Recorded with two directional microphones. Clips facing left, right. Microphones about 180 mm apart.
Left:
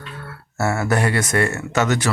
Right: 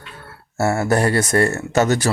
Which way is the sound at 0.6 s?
30° right (ahead or behind).